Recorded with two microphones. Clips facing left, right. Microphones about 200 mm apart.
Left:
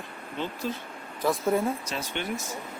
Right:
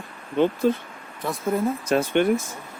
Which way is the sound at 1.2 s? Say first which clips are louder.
Left 1 dB; centre (ahead or behind).